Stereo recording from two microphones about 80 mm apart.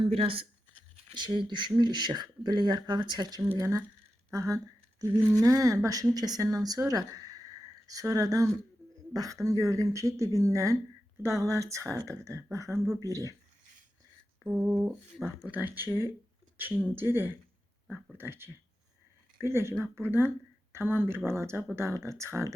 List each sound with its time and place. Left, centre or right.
1.1 s speech: right
3.5 s speech: right
14.4 s a sound: centre
15.4 s speech: right